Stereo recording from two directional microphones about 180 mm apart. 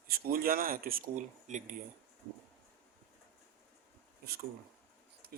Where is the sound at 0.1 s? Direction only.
55° right (ahead or behind).